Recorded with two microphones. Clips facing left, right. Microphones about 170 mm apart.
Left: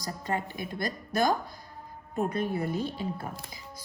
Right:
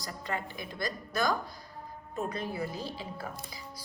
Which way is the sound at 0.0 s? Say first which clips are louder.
Left 4 dB; 40° left (ahead or behind).